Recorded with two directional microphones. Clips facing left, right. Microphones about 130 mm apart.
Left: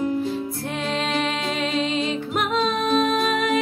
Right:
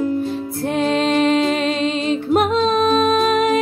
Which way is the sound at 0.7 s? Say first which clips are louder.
Right 10 dB; 40° right (ahead or behind).